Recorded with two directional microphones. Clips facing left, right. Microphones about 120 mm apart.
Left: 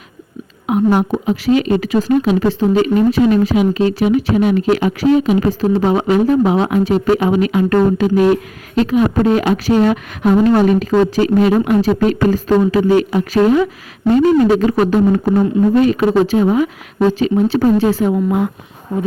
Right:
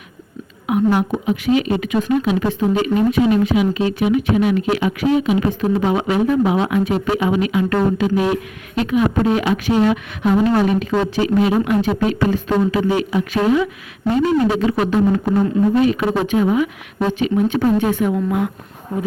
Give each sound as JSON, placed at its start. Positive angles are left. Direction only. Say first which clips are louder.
{"t": 0.7, "sound": "a woman's voice", "louder": "left 3 dB", "side_deg": 40}
{"t": 8.7, "sound": "a woman's voice", "louder": "left 4 dB", "side_deg": 35}